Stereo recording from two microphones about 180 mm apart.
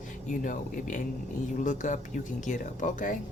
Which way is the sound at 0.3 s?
45° left (ahead or behind).